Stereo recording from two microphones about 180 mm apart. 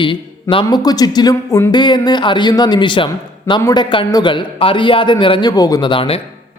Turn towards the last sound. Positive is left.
turn(degrees=30)  # may be behind; listen again after turning